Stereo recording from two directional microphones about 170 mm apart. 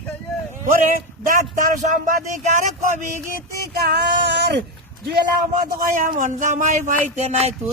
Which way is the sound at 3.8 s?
70° right (ahead or behind).